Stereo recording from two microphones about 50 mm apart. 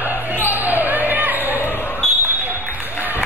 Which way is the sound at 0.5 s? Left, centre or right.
Right.